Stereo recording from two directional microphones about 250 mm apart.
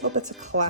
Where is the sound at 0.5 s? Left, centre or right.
Right.